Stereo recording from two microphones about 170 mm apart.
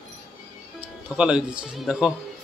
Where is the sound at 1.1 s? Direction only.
5° right (ahead or behind).